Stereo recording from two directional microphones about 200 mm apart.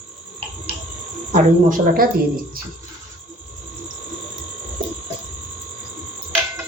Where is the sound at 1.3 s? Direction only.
40° right (ahead or behind).